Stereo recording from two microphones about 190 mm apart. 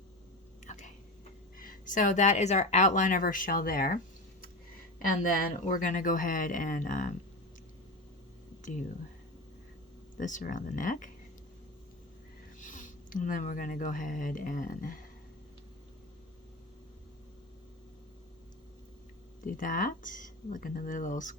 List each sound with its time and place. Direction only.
0.6 s a sound: 40° left (ahead or behind)
1.5 s speech: 45° left (ahead or behind)
10.2 s speech: 40° left (ahead or behind)
12.5 s speech: 45° left (ahead or behind)
19.5 s speech: 45° left (ahead or behind)